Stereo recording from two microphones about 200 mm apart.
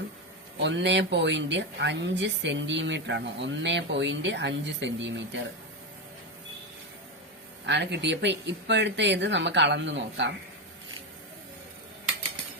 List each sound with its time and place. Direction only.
0.6 s a woman's voice: 60° right (ahead or behind)
7.7 s a woman's voice: 60° right (ahead or behind)